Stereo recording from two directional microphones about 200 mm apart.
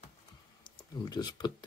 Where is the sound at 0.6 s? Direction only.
20° left (ahead or behind).